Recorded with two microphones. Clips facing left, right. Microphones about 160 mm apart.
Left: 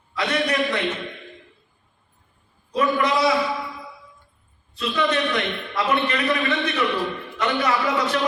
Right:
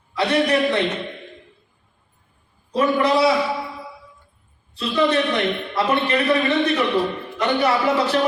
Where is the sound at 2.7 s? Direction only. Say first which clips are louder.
Right 3 dB; 30° right (ahead or behind).